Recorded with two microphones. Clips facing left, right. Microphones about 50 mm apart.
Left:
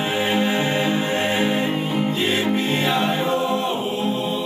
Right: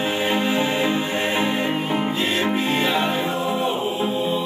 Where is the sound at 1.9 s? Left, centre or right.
Centre.